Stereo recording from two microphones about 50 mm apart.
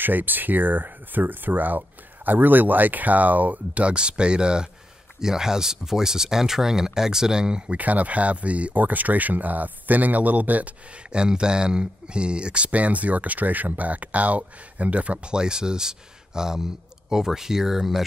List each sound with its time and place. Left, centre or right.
0.0 s speech: right
11.1 s speech: centre